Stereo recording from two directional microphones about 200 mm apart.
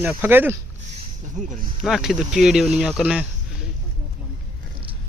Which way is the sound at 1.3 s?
40° right (ahead or behind).